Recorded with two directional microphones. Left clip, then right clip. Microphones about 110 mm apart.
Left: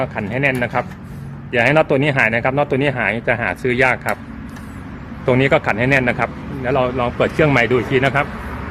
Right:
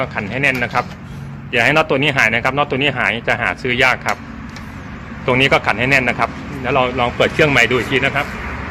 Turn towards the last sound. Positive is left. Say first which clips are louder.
# right 2 dB
turn(degrees=45)  # may be behind; listen again after turning